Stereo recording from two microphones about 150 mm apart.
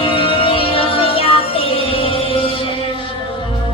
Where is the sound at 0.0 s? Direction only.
35° left (ahead or behind).